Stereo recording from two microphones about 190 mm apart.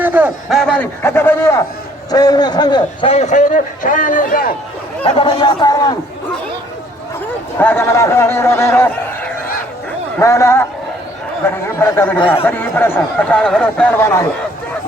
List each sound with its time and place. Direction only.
0.0 s speech: 10° right (ahead or behind)
0.6 s a man's voice: 10° left (ahead or behind); by 4.5 s 50° left (ahead or behind)
5.0 s a man's voice: 30° left (ahead or behind)
7.6 s speech: 10° left (ahead or behind)